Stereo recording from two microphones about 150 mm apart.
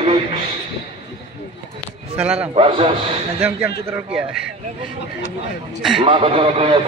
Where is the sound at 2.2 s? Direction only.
10° right (ahead or behind).